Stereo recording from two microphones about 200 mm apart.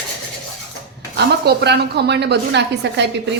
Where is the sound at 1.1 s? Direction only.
60° right (ahead or behind).